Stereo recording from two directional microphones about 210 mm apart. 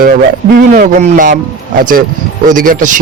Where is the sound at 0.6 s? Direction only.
40° right (ahead or behind).